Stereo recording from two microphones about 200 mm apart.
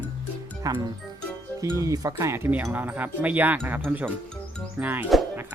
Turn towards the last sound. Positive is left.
turn(degrees=-5)  # may be behind; listen again after turning